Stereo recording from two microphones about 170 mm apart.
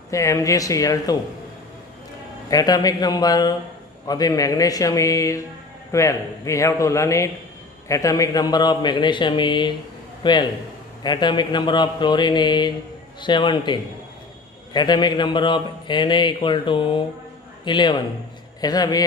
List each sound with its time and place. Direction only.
0.1 s a man's voice: 20° left (ahead or behind)
2.5 s a man's voice: 20° left (ahead or behind)